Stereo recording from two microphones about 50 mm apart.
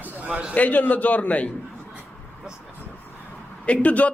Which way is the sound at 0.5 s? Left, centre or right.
Left.